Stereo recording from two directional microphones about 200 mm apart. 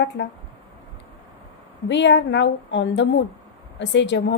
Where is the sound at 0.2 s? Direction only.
60° left (ahead or behind).